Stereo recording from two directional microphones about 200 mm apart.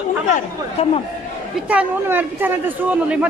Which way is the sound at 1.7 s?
10° right (ahead or behind).